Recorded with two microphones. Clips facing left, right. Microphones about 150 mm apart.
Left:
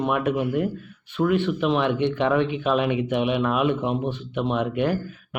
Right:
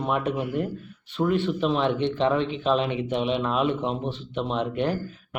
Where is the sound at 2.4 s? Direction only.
10° left (ahead or behind).